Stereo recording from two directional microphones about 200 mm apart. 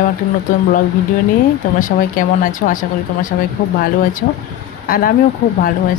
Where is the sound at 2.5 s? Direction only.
40° left (ahead or behind).